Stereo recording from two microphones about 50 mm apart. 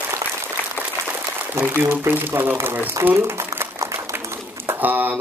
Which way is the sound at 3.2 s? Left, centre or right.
Right.